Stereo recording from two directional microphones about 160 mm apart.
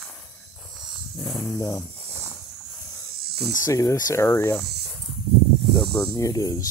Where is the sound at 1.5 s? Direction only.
20° left (ahead or behind).